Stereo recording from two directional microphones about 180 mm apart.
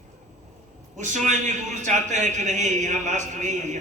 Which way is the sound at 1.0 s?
45° right (ahead or behind).